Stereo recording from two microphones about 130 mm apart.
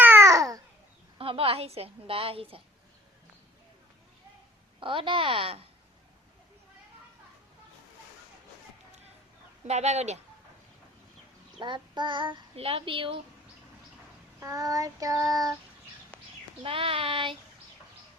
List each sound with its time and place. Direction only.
0.0 s babbling: 20° right (ahead or behind)
1.2 s a woman's voice: 45° right (ahead or behind)
4.8 s a child's voice: 40° right (ahead or behind)
9.6 s speech: 60° right (ahead or behind)
11.6 s a child's voice: 35° right (ahead or behind)
14.4 s child singing: 25° right (ahead or behind)
16.6 s a woman's voice: 45° right (ahead or behind)